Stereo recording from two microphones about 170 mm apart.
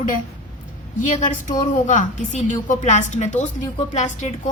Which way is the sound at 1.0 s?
45° left (ahead or behind).